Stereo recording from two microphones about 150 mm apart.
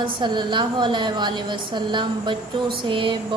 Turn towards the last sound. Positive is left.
turn(degrees=-35)  # may be behind; listen again after turning